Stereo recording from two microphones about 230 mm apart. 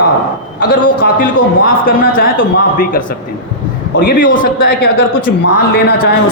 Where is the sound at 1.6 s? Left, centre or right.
Left.